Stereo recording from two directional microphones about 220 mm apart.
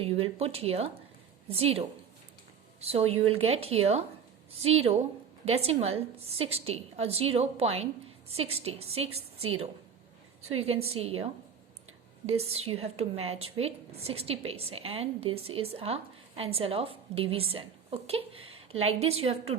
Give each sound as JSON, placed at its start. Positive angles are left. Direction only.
{"t": 0.0, "sound": "a woman's voice", "side_deg": -25}
{"t": 2.8, "sound": "a woman's voice", "side_deg": -25}
{"t": 10.9, "sound": "a woman's voice", "side_deg": -25}
{"t": 12.5, "sound": "a woman's voice", "side_deg": -25}